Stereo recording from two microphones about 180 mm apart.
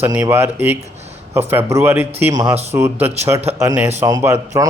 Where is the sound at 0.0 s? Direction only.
10° right (ahead or behind).